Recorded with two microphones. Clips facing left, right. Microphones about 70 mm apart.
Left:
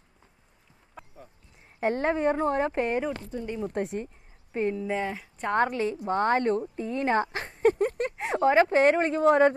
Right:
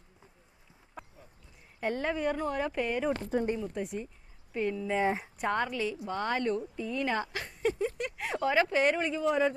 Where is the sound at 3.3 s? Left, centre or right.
Right.